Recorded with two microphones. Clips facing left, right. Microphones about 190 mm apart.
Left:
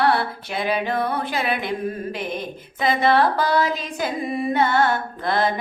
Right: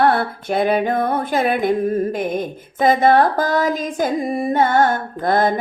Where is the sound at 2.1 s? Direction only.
45° right (ahead or behind).